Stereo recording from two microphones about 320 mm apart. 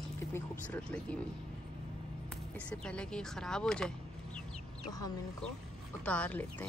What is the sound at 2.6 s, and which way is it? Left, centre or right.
Speech, centre.